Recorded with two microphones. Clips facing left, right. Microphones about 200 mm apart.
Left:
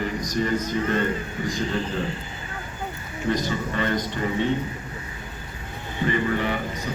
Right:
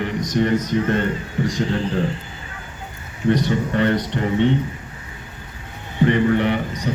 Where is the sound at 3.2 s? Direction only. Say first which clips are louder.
Right 6 dB; 65° right (ahead or behind).